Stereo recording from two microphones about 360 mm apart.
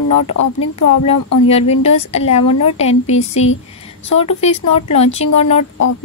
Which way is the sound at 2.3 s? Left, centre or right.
Left.